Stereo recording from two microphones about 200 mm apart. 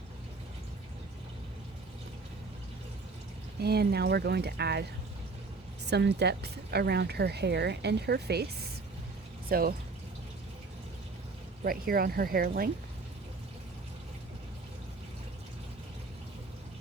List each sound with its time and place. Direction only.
3.6 s speech: 55° right (ahead or behind)
9.5 s speech: 50° right (ahead or behind)
11.6 s speech: 45° right (ahead or behind)